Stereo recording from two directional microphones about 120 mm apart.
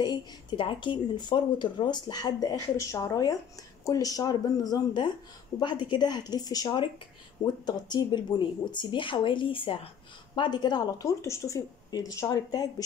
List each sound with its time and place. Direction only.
0.0 s speech: 40° left (ahead or behind)